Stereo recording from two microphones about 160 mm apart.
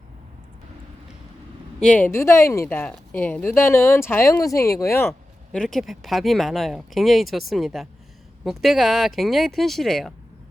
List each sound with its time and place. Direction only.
1.8 s a woman's voice: 10° left (ahead or behind)
5.5 s speech: 5° left (ahead or behind)